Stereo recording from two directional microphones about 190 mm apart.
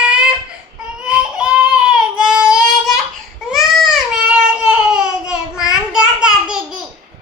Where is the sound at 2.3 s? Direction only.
5° right (ahead or behind).